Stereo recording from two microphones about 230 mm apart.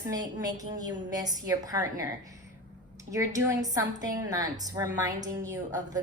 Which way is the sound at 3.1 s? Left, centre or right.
Centre.